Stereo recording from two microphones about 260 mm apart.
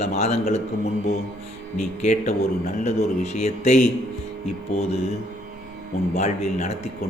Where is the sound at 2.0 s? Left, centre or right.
Left.